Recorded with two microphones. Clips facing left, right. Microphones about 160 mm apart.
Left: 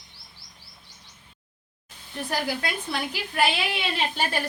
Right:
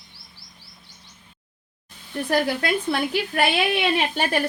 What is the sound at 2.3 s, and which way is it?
Speech, 60° right (ahead or behind).